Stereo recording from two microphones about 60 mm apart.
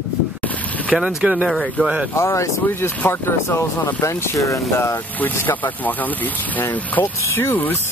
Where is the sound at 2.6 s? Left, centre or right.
Left.